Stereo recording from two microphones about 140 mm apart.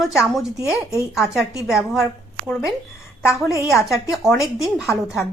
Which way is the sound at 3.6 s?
Centre (ahead or behind).